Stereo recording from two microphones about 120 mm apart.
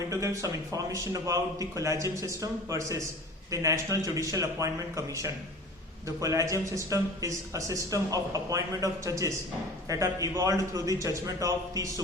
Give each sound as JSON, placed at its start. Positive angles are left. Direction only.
{"t": 0.1, "sound": "a man's voice", "side_deg": -25}